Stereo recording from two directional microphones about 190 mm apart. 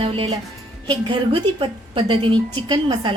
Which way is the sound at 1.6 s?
25° right (ahead or behind).